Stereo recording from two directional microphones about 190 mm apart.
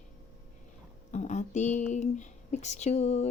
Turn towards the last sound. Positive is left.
turn(degrees=35)  # may be behind; listen again after turning